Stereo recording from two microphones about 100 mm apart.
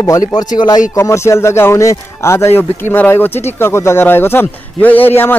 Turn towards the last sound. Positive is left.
turn(degrees=20)  # may be behind; listen again after turning